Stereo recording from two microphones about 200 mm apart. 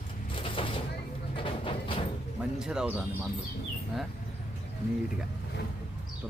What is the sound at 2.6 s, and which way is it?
Speech, 5° right (ahead or behind).